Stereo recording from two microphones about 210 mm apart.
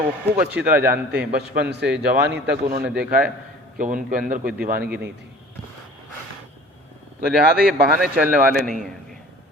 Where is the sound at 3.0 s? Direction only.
50° right (ahead or behind).